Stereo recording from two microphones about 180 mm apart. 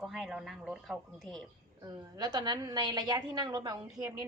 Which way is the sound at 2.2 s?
20° right (ahead or behind).